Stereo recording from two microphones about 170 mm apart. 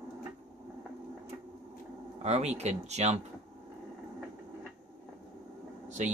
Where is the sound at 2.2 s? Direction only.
40° right (ahead or behind).